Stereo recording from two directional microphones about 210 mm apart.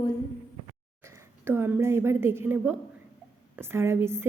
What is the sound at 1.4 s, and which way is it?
A woman's voice, 10° right (ahead or behind).